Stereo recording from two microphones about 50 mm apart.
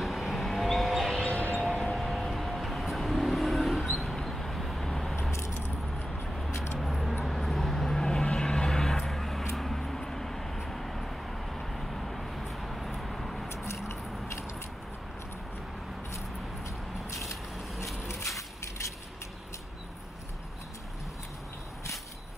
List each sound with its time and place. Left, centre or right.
0.0 s vehicle: centre
1.2 s a sound: left
1.8 s vehicle: centre
5.3 s keys jangling: left
6.8 s vehicle: centre
13.8 s biting: left
16.6 s a sound: left